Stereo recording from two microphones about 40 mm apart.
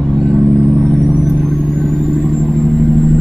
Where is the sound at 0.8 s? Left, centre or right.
Centre.